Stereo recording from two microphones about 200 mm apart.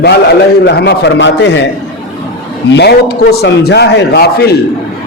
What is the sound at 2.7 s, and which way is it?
A man's voice, 55° left (ahead or behind).